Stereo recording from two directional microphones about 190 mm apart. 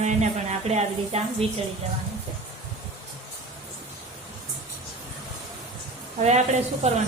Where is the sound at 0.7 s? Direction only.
35° right (ahead or behind).